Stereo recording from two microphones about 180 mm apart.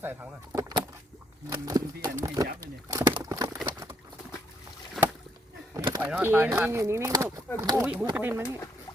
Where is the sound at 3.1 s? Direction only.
20° right (ahead or behind).